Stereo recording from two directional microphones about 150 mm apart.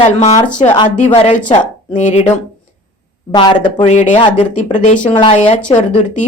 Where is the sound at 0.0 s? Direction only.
50° left (ahead or behind).